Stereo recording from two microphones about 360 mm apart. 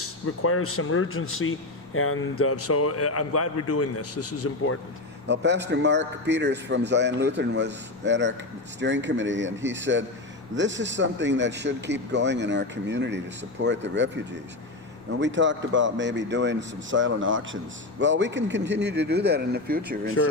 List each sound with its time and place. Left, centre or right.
0.0 s speech: left
5.3 s speech: right
15.2 s speech: right